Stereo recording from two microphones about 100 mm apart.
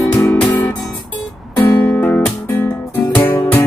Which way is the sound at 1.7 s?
20° left (ahead or behind).